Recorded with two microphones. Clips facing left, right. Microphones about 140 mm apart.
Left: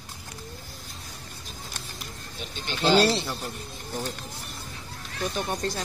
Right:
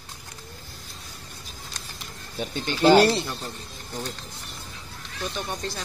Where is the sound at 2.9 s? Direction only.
50° right (ahead or behind).